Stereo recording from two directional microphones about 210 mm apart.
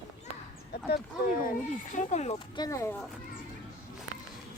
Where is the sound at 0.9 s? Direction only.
45° left (ahead or behind); by 2.9 s 15° left (ahead or behind).